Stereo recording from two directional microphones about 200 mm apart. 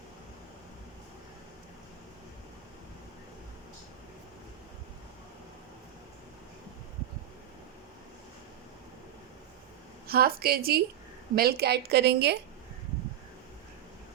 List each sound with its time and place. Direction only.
10.1 s a woman's voice: 50° right (ahead or behind)